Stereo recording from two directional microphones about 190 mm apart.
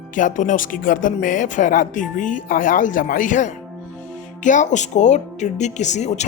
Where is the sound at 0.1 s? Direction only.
45° left (ahead or behind).